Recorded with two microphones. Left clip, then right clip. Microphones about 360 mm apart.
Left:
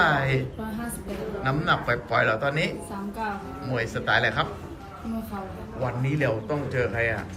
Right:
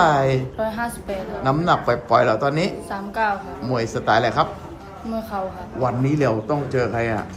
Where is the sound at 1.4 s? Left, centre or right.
Centre.